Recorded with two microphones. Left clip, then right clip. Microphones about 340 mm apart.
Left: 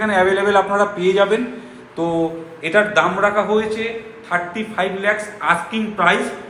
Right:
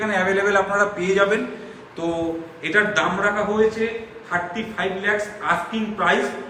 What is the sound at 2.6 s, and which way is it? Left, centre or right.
Speech, centre.